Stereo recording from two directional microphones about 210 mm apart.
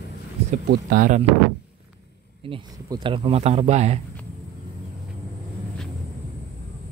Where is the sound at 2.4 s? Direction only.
25° right (ahead or behind).